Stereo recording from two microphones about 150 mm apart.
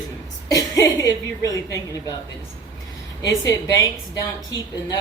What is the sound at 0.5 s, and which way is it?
A woman's voice, 25° left (ahead or behind).